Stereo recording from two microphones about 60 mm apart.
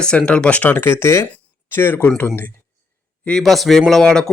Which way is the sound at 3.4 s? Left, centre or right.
Centre.